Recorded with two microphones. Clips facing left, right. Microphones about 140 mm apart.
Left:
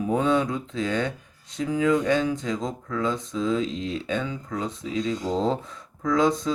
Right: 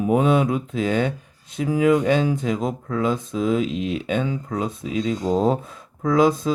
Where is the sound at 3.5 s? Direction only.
15° right (ahead or behind).